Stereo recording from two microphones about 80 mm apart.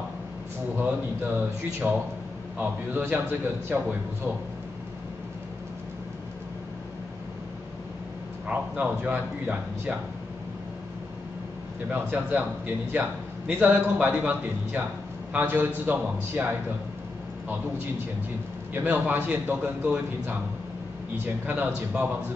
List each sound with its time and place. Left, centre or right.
0.7 s a man's voice: right
3.1 s a man's voice: right
8.5 s a man's voice: centre
11.9 s a man's voice: right
18.7 s a man's voice: right
21.5 s a man's voice: right